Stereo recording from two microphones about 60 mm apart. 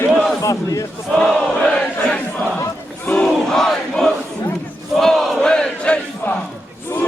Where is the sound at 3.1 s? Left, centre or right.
Centre.